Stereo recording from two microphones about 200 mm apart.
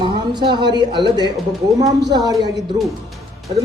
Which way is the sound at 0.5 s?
20° right (ahead or behind).